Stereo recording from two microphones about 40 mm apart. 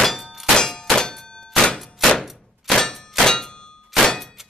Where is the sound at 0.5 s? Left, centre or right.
Centre.